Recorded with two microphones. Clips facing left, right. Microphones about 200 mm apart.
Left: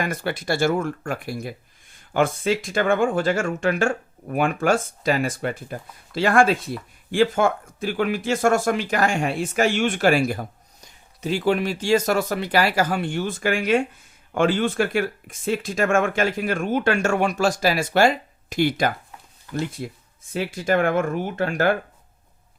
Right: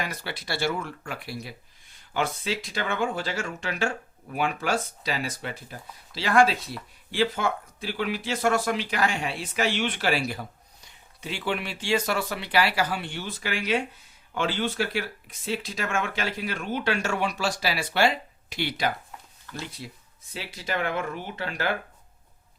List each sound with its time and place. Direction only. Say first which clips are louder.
0.0 s speech: left 8 dB; 50° left (ahead or behind)